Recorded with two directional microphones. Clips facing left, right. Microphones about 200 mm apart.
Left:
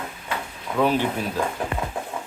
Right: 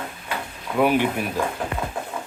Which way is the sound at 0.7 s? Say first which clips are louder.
Right 2 dB; 15° right (ahead or behind).